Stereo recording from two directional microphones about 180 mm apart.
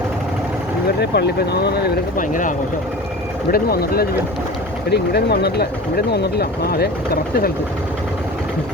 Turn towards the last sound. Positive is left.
turn(degrees=55)  # may be behind; listen again after turning